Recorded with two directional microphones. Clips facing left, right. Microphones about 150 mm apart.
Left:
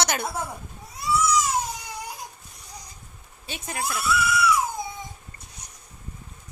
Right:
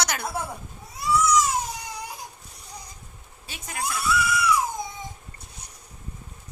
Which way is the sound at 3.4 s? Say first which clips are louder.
Left 2 dB; 25° left (ahead or behind).